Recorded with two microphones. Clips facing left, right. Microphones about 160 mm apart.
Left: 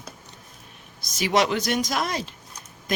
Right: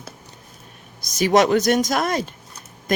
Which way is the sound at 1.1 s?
45° right (ahead or behind).